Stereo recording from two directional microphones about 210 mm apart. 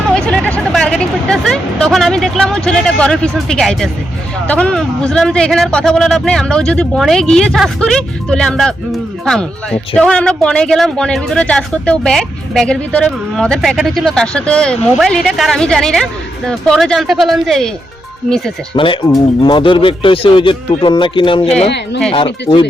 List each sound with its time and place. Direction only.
0.1 s hubbub: 5° left (ahead or behind)
4.4 s speech: 5° left (ahead or behind)
18.7 s speech: 25° left (ahead or behind)